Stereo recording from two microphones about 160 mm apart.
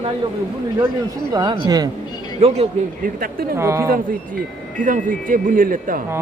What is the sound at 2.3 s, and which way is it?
Speech, 40° right (ahead or behind).